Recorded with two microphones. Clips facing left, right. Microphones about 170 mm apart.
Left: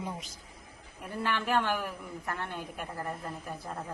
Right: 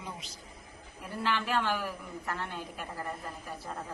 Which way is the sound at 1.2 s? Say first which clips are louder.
Left 1 dB; 50° left (ahead or behind).